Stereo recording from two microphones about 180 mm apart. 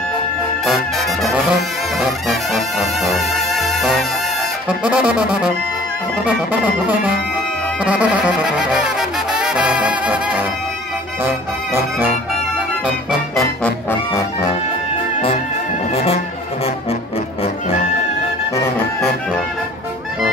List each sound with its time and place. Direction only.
0.7 s brass instrument: centre (ahead or behind)
2.0 s music: centre (ahead or behind)
7.8 s brass instrument: 5° right (ahead or behind)
13.8 s music: 15° left (ahead or behind)
15.9 s music: 35° left (ahead or behind)